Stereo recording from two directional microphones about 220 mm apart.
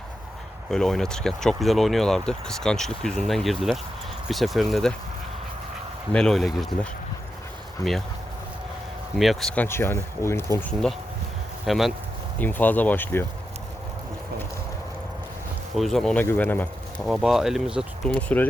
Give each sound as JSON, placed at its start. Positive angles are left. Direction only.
{"t": 0.7, "sound": "speech", "side_deg": 0}
{"t": 6.1, "sound": "speech", "side_deg": 0}
{"t": 7.8, "sound": "speech", "side_deg": -15}
{"t": 9.1, "sound": "speech", "side_deg": 0}
{"t": 15.7, "sound": "speech", "side_deg": 0}